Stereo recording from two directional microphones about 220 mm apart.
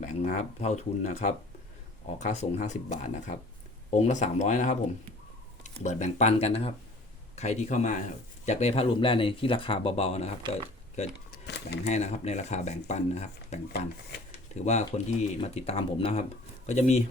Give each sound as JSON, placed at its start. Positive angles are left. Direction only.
{"t": 0.0, "sound": "speech", "side_deg": 30}
{"t": 10.9, "sound": "a sound", "side_deg": 35}
{"t": 11.9, "sound": "speech", "side_deg": 30}